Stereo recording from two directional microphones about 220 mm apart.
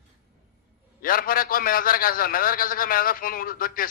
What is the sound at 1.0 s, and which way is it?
A man's voice, 40° left (ahead or behind).